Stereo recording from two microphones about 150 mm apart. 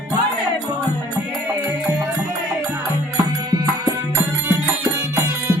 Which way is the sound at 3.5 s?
20° right (ahead or behind).